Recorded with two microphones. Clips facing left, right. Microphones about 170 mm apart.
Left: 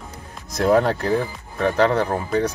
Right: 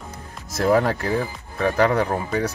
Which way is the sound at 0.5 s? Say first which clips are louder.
Left 1 dB; 5° right (ahead or behind).